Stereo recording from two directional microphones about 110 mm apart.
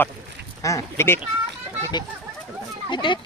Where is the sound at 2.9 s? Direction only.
45° left (ahead or behind).